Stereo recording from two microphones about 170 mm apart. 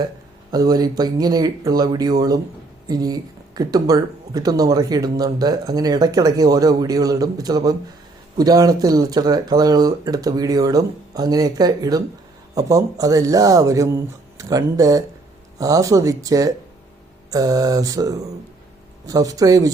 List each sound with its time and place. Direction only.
0.5 s speech: 25° right (ahead or behind)